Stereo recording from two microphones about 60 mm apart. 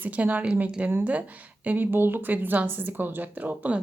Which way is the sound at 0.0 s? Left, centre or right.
Right.